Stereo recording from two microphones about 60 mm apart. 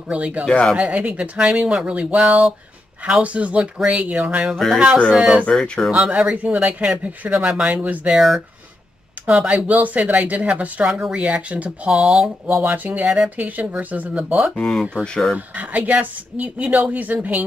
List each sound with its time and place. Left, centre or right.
0.1 s speech: right
5.5 s speech: centre
5.9 s speech: centre
8.1 s speech: centre
9.7 s speech: right
10.9 s speech: centre
11.1 s speech: right
11.9 s speech: centre
12.5 s speech: right
13.0 s speech: centre
13.4 s speech: right
14.1 s speech: centre
14.5 s speech: centre
15.3 s speech: right